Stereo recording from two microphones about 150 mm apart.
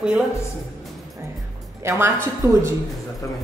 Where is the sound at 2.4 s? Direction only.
15° right (ahead or behind).